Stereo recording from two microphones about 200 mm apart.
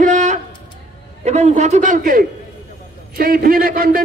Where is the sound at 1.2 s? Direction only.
35° right (ahead or behind).